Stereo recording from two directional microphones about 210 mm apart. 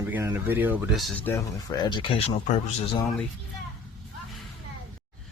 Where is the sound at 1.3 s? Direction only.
20° left (ahead or behind).